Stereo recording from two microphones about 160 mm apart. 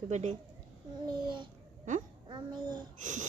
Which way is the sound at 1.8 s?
50° right (ahead or behind).